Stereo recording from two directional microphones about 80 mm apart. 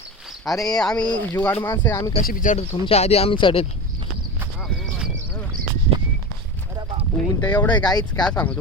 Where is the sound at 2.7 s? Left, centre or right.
Left.